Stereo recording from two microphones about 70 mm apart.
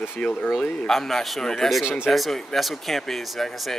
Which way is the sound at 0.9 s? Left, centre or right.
Centre.